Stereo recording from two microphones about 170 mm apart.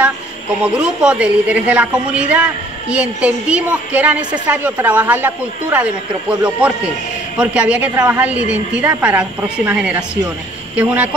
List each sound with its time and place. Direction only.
0.6 s a woman's voice: 5° right (ahead or behind)
7.3 s a woman's voice: 5° right (ahead or behind)